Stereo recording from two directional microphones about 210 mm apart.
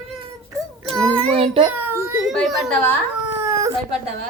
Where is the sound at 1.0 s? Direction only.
30° right (ahead or behind).